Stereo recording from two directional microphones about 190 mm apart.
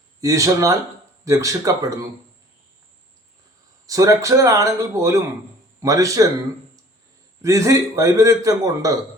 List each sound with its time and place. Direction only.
0.2 s a man's voice: 15° right (ahead or behind)
3.8 s a man's voice: 20° right (ahead or behind)
7.4 s a man's voice: 15° right (ahead or behind)